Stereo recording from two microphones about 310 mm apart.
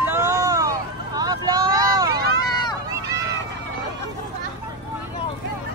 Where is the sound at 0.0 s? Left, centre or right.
Centre.